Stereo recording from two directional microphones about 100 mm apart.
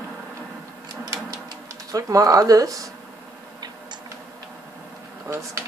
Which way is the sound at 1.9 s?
35° right (ahead or behind).